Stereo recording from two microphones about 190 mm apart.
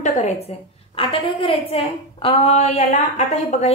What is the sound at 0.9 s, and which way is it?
A woman's voice, 30° left (ahead or behind).